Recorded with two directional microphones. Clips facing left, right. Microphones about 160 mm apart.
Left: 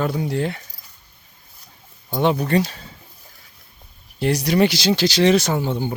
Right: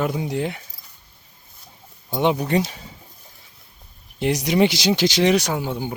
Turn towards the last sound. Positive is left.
turn(degrees=-10)  # may be behind; listen again after turning